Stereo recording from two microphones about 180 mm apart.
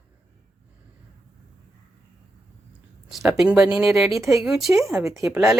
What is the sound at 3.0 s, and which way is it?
Speech, centre (ahead or behind).